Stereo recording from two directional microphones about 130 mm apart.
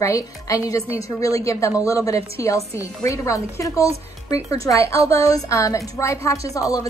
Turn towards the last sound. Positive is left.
turn(degrees=25)  # may be behind; listen again after turning